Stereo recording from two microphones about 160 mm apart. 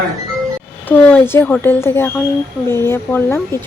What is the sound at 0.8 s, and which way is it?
Speech, 10° left (ahead or behind).